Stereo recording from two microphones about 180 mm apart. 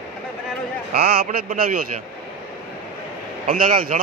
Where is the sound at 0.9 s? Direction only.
55° right (ahead or behind).